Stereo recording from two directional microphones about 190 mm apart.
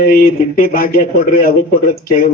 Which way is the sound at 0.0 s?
45° left (ahead or behind).